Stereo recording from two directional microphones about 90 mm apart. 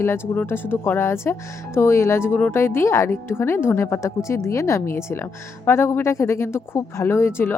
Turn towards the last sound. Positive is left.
turn(degrees=25)  # may be behind; listen again after turning